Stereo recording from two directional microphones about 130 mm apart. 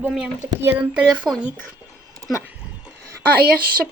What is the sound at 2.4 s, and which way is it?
Dog, 10° right (ahead or behind).